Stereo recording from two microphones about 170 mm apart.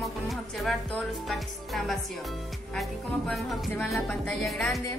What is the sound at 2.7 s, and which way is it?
Music, centre (ahead or behind).